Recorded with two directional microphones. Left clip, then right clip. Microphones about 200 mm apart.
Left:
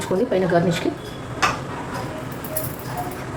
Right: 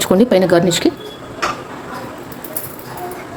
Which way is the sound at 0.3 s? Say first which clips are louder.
Right 7 dB; 55° right (ahead or behind).